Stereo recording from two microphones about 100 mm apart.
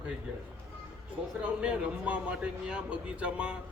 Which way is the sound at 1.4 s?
10° right (ahead or behind).